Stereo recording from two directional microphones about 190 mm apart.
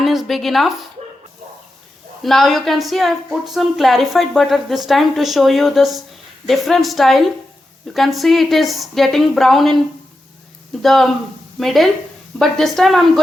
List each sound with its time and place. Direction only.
0.0 s speech: centre (ahead or behind)
2.2 s a woman's voice: centre (ahead or behind)
10.8 s a woman's voice: centre (ahead or behind)